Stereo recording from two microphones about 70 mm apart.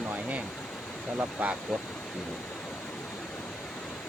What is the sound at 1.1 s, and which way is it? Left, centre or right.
Speech, centre.